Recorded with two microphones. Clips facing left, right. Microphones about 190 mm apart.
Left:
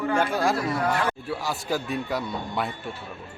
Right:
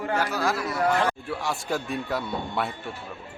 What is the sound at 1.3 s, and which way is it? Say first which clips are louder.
Speech: left 1 dB; centre (ahead or behind).